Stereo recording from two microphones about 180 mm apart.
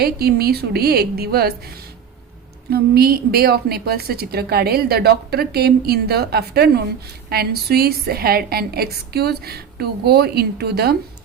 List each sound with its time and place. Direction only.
0.0 s a woman's voice: 60° right (ahead or behind)
2.6 s a woman's voice: 60° right (ahead or behind)